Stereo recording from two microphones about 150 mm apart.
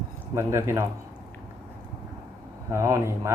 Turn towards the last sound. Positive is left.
turn(degrees=-20)  # may be behind; listen again after turning